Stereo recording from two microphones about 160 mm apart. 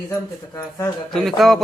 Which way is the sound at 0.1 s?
20° left (ahead or behind).